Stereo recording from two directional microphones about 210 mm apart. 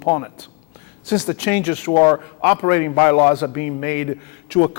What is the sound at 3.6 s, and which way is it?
Speech, 30° left (ahead or behind).